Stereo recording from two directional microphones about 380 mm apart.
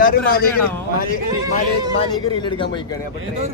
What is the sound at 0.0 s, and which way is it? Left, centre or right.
Speech, left.